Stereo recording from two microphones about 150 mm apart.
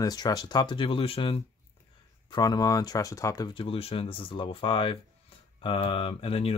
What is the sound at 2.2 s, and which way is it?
Speech, 25° left (ahead or behind).